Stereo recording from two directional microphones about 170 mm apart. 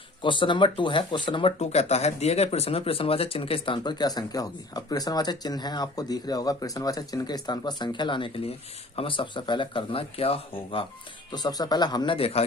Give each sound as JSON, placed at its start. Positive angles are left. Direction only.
{"t": 0.2, "sound": "speech", "side_deg": 30}